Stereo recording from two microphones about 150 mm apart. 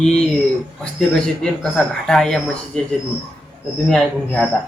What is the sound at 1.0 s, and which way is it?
Speech, 5° left (ahead or behind).